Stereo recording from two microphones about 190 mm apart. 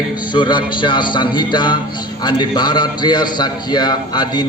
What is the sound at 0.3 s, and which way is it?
A man's voice, 25° left (ahead or behind).